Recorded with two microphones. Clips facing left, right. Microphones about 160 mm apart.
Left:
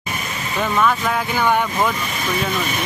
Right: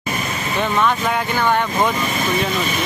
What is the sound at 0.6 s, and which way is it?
Speech, centre (ahead or behind).